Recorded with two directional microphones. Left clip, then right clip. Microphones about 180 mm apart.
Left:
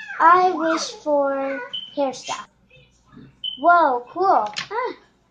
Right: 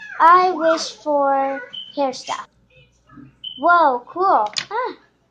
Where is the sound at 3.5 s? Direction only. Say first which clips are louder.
Right 1 dB; 10° right (ahead or behind).